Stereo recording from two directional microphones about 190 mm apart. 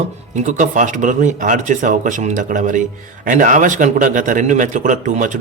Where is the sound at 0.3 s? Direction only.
40° right (ahead or behind).